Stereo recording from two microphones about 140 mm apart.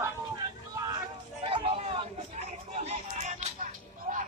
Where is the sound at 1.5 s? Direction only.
40° right (ahead or behind); by 3.5 s 55° right (ahead or behind).